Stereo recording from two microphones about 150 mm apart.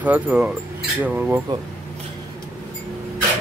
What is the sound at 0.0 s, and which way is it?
Speech, 10° right (ahead or behind).